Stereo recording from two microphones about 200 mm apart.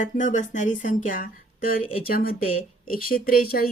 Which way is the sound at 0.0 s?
40° left (ahead or behind).